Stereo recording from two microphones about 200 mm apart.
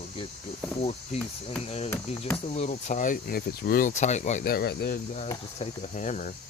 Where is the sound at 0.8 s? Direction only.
30° left (ahead or behind); by 5.0 s 50° left (ahead or behind).